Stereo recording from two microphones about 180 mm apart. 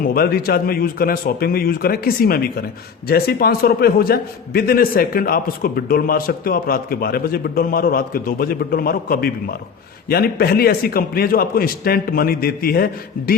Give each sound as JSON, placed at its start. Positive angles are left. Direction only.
{"t": 0.0, "sound": "a man's voice", "side_deg": 55}